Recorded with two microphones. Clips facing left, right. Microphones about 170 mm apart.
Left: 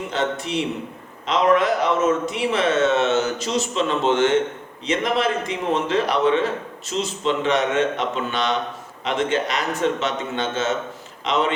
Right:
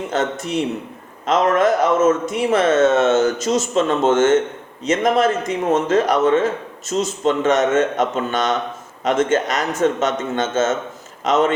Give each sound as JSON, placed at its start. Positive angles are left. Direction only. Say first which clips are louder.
{"t": 0.1, "sound": "a man's voice", "louder": "right 2 dB", "side_deg": -45}